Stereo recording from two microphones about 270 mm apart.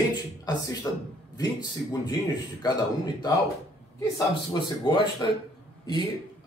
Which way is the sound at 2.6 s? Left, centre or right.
Centre.